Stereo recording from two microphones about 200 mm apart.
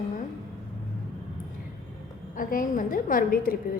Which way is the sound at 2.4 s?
45° left (ahead or behind).